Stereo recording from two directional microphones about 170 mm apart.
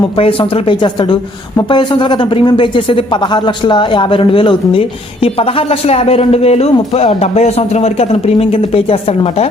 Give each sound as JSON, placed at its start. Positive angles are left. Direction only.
{"t": 0.2, "sound": "speech", "side_deg": 30}